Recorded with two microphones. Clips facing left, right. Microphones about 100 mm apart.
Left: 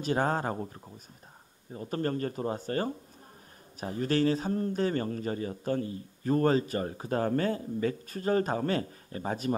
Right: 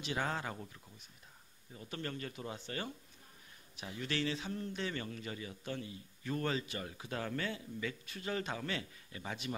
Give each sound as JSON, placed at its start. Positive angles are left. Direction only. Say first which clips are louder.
{"t": 0.0, "sound": "speech", "louder": "left 9 dB", "side_deg": 40}